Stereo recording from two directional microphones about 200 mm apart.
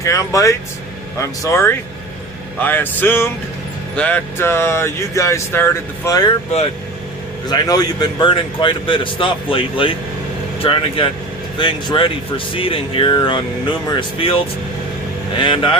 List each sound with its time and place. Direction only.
0.0 s speech: 15° left (ahead or behind)
7.4 s speech: 20° left (ahead or behind)